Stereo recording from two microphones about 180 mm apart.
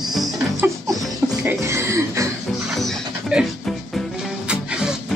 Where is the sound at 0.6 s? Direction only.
10° right (ahead or behind).